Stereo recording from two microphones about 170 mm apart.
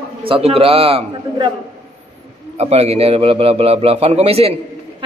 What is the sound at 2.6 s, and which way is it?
A man's voice, 40° right (ahead or behind).